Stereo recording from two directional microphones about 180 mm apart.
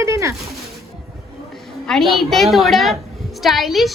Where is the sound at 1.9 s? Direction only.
Centre (ahead or behind).